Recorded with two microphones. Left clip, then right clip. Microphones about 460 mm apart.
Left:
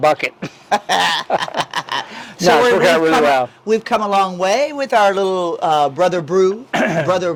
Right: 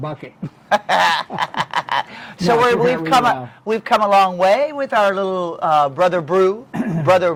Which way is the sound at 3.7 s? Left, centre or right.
Right.